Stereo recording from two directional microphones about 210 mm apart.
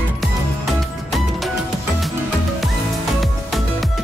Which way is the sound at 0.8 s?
Centre (ahead or behind).